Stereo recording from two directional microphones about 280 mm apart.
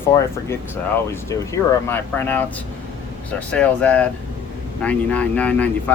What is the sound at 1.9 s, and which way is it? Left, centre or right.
Speech, centre.